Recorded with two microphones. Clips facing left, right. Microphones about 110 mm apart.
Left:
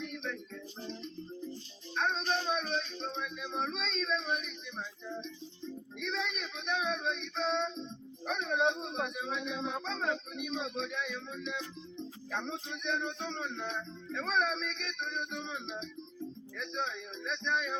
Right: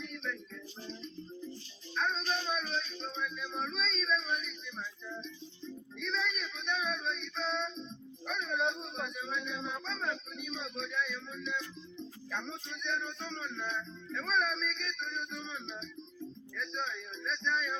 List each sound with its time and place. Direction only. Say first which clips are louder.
0.0 s music: left 2 dB; 60° left (ahead or behind)
2.0 s music: left 2 dB; 60° left (ahead or behind)
6.0 s female singing: even; 70° left (ahead or behind)